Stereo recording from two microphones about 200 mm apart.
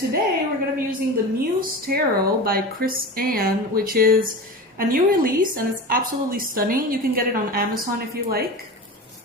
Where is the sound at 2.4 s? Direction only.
45° right (ahead or behind).